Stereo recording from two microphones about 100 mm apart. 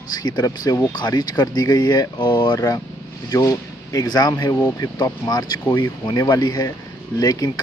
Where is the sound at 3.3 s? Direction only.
35° left (ahead or behind).